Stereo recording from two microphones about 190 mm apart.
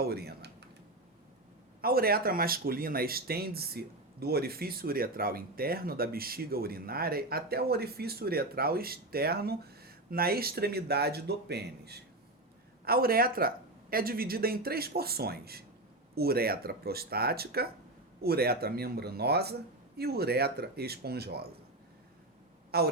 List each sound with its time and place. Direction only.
0.0 s speech: 55° right (ahead or behind)
1.8 s speech: 50° right (ahead or behind)
22.7 s speech: 55° right (ahead or behind)